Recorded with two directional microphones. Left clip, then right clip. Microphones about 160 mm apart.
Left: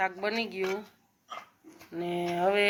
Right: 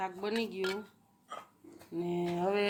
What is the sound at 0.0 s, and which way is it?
Speech, 5° left (ahead or behind).